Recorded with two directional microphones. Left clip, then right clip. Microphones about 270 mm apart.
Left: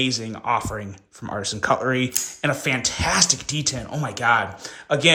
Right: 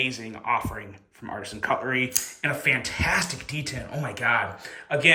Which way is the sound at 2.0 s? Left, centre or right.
Centre.